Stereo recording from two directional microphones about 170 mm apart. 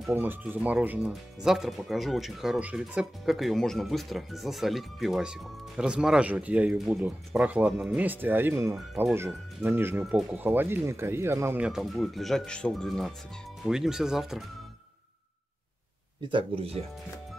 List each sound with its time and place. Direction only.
0.1 s speech: 10° right (ahead or behind)
16.3 s speech: 30° right (ahead or behind)